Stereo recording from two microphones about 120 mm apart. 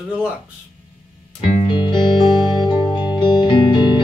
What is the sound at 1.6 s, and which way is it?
Music, 40° left (ahead or behind).